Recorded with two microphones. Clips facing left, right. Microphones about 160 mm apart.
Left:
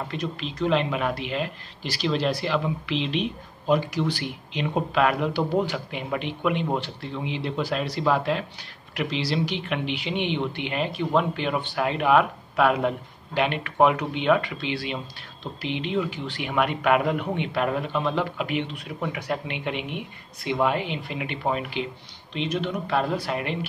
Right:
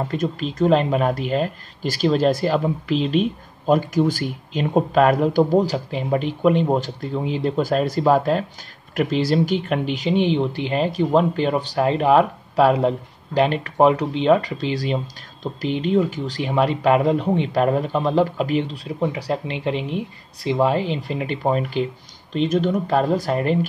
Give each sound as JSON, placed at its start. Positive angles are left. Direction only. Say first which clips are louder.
{"t": 0.1, "sound": "speech", "louder": "right 7 dB", "side_deg": -45}